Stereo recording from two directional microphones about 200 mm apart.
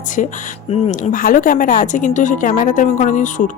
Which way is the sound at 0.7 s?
40° left (ahead or behind).